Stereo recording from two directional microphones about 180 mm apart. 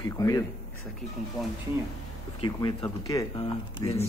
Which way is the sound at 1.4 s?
Centre (ahead or behind).